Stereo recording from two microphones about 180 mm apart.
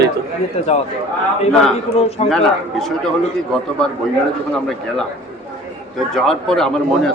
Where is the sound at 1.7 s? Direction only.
35° left (ahead or behind).